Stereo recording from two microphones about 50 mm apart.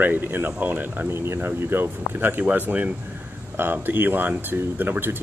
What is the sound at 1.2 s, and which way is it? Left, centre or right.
Speech, right.